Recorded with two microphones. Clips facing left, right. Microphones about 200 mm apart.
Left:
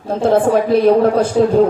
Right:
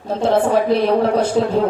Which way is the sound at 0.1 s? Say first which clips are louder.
Left 3 dB; 55° left (ahead or behind).